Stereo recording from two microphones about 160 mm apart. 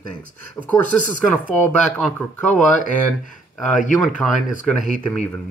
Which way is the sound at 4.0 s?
5° left (ahead or behind).